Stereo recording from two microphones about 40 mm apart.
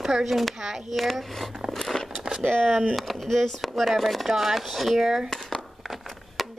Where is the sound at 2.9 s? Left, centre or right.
Centre.